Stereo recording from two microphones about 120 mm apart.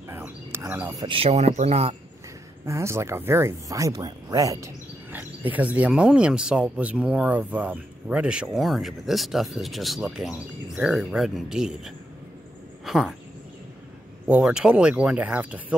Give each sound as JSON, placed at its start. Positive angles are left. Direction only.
{"t": 0.1, "sound": "a sound", "side_deg": -20}
{"t": 0.8, "sound": "speech", "side_deg": -30}
{"t": 1.1, "sound": "speech", "side_deg": -60}
{"t": 2.6, "sound": "speech", "side_deg": -25}
{"t": 5.4, "sound": "speech", "side_deg": -15}
{"t": 14.2, "sound": "speech", "side_deg": -5}